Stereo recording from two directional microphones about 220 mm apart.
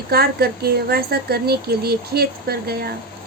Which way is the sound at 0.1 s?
45° right (ahead or behind).